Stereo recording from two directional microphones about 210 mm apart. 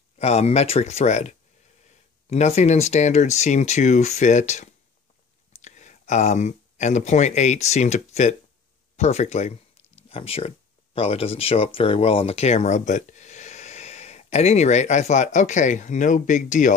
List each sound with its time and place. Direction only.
0.2 s speech: 30° left (ahead or behind)